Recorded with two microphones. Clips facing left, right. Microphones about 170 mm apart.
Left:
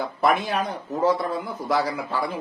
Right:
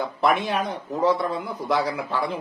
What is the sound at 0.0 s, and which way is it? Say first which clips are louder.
A man's voice: even; centre (ahead or behind).